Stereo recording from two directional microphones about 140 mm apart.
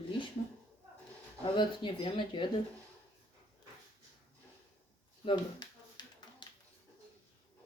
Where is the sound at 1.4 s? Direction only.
35° left (ahead or behind).